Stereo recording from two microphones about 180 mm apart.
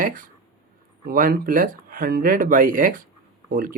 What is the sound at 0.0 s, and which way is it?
Speech, 50° right (ahead or behind).